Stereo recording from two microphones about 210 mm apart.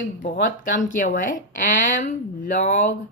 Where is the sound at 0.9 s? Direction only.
40° left (ahead or behind).